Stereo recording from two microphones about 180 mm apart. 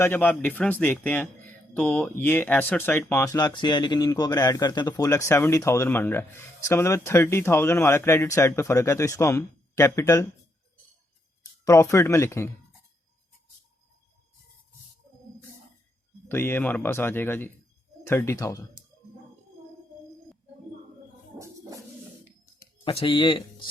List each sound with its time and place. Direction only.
0.0 s speech: 10° left (ahead or behind)
11.6 s speech: 15° left (ahead or behind)
16.3 s speech: 10° left (ahead or behind)
21.3 s a sound: 15° right (ahead or behind)
22.6 s speech: 30° left (ahead or behind)